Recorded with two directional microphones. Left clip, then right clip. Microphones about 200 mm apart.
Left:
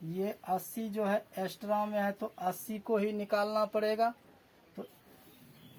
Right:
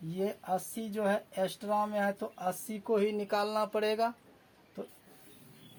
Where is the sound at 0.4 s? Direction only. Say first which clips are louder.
Even; 40° right (ahead or behind).